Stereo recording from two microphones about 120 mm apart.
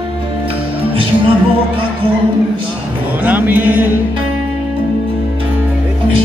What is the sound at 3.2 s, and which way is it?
Music, 15° right (ahead or behind).